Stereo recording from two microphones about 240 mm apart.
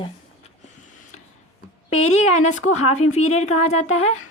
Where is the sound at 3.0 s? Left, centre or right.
Left.